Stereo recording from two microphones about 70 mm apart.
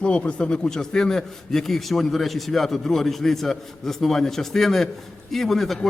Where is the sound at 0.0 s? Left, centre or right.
Centre.